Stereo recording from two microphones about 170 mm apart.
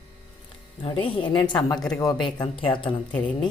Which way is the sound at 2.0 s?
25° left (ahead or behind).